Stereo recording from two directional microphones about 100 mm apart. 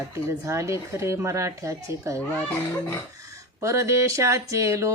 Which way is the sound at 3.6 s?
30° right (ahead or behind).